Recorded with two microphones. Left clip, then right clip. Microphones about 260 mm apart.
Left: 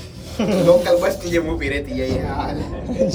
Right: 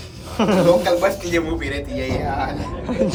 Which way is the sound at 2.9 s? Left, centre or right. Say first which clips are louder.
Left 1 dB; right.